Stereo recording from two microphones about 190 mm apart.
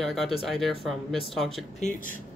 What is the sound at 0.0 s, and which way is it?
Speech, centre (ahead or behind).